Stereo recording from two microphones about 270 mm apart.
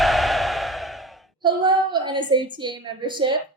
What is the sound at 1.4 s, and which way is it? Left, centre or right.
A woman's voice, centre.